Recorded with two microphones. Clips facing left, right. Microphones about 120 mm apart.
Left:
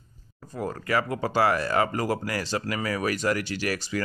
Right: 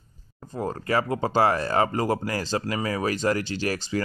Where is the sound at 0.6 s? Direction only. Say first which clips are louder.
Right 2 dB; 30° right (ahead or behind).